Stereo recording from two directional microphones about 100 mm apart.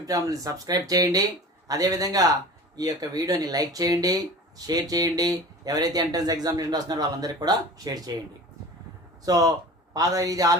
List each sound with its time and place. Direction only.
0.0 s speech: 35° right (ahead or behind)
9.2 s speech: 40° right (ahead or behind)